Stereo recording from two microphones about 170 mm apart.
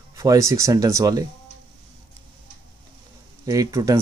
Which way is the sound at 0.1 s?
20° right (ahead or behind).